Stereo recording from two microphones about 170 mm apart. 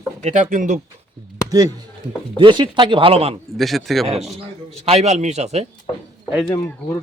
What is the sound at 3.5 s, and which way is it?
Speech, centre (ahead or behind).